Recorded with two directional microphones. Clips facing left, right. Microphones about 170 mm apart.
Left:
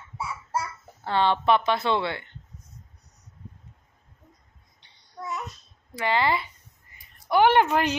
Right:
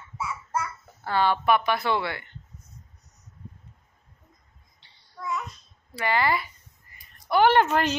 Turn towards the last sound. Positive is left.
turn(degrees=15)  # may be behind; listen again after turning